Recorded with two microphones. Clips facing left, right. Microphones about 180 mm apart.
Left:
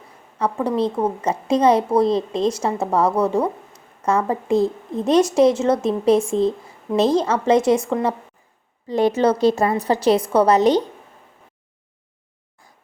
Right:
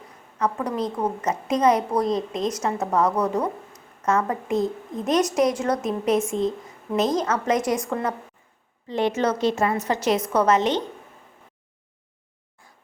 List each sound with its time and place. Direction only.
0.3 s a woman's voice: 30° left (ahead or behind)
8.9 s a woman's voice: 40° left (ahead or behind)